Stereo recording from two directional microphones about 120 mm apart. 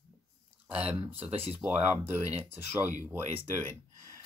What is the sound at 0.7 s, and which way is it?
Speech, 60° right (ahead or behind).